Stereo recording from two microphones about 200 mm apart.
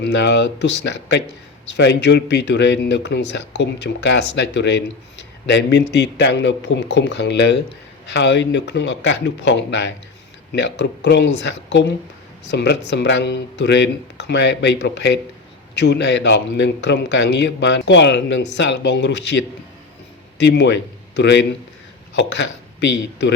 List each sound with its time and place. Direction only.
0.0 s a man's voice: 60° left (ahead or behind)